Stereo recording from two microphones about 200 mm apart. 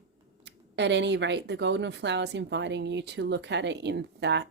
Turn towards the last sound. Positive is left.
turn(degrees=-60)  # may be behind; listen again after turning